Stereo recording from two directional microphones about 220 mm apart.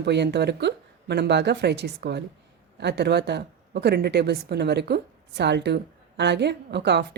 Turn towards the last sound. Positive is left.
turn(degrees=-50)  # may be behind; listen again after turning